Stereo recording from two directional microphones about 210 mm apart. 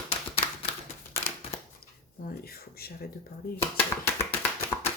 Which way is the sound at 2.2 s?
45° left (ahead or behind).